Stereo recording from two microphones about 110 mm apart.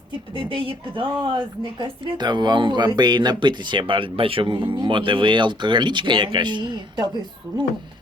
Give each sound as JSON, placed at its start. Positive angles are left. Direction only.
{"t": 0.3, "sound": "a woman's voice", "side_deg": -50}